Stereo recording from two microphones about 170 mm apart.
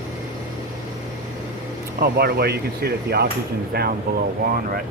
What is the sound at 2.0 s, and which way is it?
Speech, 65° right (ahead or behind).